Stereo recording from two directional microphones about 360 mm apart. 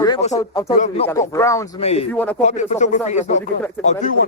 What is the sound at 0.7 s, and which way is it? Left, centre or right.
Speech, left.